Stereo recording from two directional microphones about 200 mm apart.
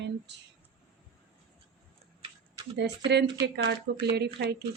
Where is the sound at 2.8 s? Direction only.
60° right (ahead or behind).